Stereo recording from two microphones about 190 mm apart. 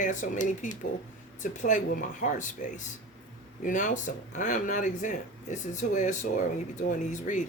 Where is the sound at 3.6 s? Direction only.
45° left (ahead or behind).